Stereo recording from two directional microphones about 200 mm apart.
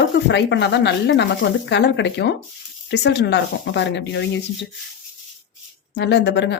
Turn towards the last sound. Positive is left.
turn(degrees=60)  # may be behind; listen again after turning